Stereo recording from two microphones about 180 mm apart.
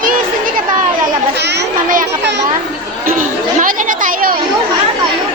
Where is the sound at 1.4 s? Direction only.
70° right (ahead or behind).